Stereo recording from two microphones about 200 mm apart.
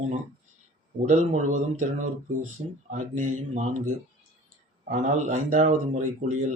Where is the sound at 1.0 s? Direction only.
35° right (ahead or behind).